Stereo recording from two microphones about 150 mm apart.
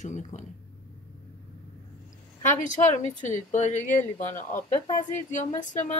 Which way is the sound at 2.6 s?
55° left (ahead or behind).